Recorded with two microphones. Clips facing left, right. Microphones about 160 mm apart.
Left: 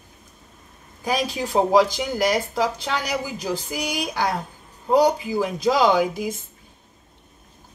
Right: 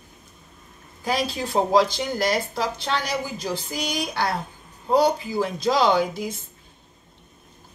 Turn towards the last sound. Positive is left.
turn(degrees=15)  # may be behind; listen again after turning